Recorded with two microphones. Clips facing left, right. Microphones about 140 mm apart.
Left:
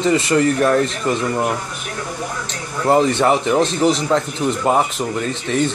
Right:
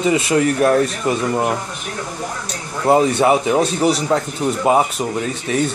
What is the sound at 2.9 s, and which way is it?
Speech, 10° right (ahead or behind).